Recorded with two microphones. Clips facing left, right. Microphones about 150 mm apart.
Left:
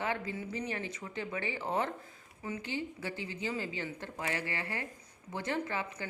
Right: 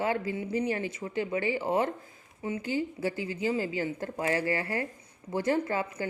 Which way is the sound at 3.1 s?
25° left (ahead or behind).